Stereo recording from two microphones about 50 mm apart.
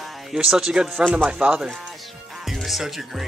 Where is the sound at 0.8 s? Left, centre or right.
Centre.